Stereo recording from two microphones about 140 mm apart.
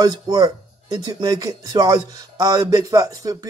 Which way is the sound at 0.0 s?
25° right (ahead or behind).